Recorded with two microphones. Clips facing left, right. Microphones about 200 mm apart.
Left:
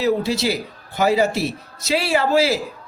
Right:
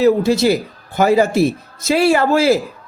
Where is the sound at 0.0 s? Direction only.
50° right (ahead or behind).